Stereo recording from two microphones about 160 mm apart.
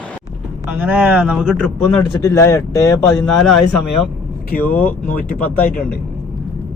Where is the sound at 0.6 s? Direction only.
10° right (ahead or behind); by 2.0 s 5° left (ahead or behind).